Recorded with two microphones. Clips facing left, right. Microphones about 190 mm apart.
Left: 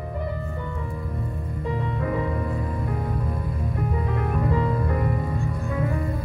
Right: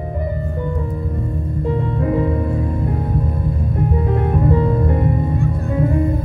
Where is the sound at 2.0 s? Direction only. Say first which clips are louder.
Right 8 dB; 35° right (ahead or behind).